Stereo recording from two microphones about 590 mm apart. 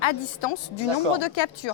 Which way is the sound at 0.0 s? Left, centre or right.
Left.